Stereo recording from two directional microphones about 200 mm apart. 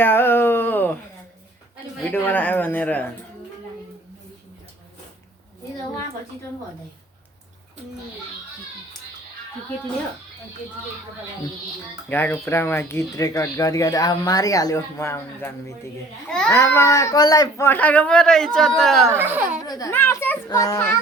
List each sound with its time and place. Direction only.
0.0 s a sound: 10° left (ahead or behind)
2.1 s speech: 10° left (ahead or behind)
12.0 s a child's voice: 10° left (ahead or behind)
19.0 s speech: 10° right (ahead or behind)
19.6 s speech: 20° left (ahead or behind)